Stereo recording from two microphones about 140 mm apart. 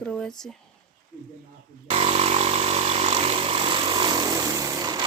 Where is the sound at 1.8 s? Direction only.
45° right (ahead or behind).